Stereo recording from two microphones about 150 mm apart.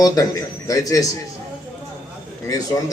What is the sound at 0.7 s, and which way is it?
Speech, 25° left (ahead or behind).